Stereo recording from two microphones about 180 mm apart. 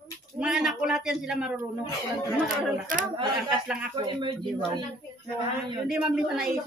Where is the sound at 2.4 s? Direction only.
50° right (ahead or behind).